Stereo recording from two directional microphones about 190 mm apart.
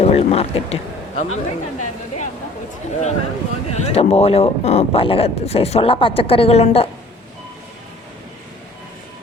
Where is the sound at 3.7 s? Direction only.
35° left (ahead or behind).